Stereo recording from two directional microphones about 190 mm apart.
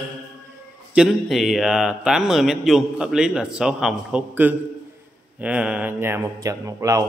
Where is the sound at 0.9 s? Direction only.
Centre (ahead or behind).